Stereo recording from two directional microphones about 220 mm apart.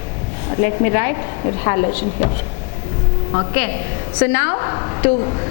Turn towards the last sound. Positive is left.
turn(degrees=20)  # may be behind; listen again after turning